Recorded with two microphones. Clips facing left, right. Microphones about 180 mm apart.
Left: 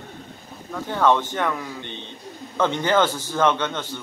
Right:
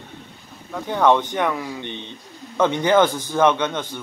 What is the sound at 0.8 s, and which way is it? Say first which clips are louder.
A man's voice: right 2 dB; 15° right (ahead or behind).